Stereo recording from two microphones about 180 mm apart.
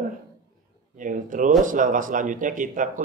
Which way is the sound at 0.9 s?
45° right (ahead or behind).